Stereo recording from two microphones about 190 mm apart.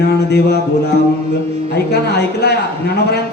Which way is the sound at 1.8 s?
60° left (ahead or behind).